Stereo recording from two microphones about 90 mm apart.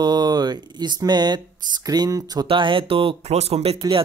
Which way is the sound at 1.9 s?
40° right (ahead or behind).